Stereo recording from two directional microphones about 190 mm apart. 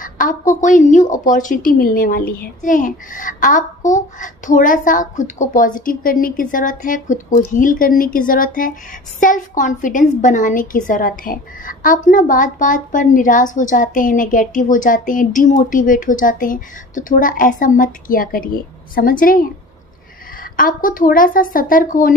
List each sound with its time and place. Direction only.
0.0 s a woman's voice: 45° left (ahead or behind)
20.5 s a woman's voice: 45° left (ahead or behind)